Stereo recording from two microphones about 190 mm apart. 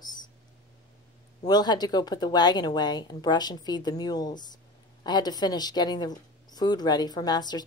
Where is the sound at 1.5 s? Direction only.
20° left (ahead or behind).